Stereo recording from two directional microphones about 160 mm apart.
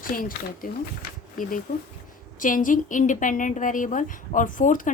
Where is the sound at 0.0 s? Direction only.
60° left (ahead or behind).